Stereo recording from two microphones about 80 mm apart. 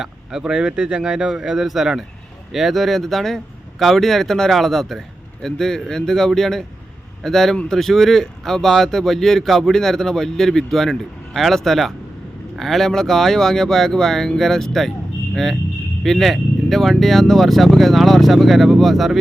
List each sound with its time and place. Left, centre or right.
0.0 s speech: centre
16.0 s speech: centre